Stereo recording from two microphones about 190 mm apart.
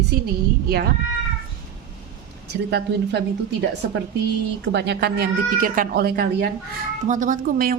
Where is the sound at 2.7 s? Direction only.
60° right (ahead or behind).